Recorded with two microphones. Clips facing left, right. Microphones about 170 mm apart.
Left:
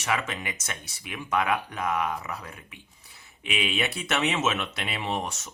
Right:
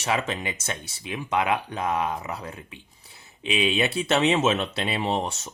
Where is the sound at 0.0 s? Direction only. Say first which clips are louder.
Right 3 dB; 30° right (ahead or behind).